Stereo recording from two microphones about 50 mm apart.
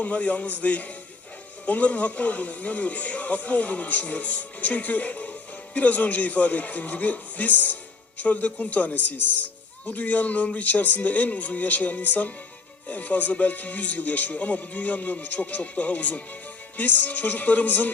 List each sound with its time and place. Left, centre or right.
0.0 s speech: left